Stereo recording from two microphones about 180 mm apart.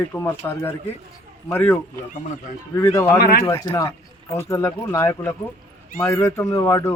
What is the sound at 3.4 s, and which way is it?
Speech, 15° left (ahead or behind).